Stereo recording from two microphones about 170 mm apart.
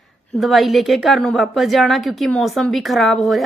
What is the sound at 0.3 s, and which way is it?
A woman's voice, centre (ahead or behind).